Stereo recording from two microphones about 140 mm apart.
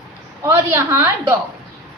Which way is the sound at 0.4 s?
20° right (ahead or behind).